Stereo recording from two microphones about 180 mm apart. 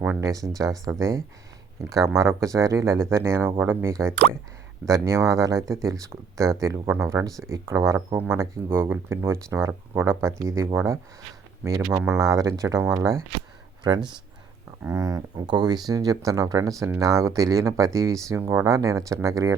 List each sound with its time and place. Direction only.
0.0 s speech: 15° right (ahead or behind)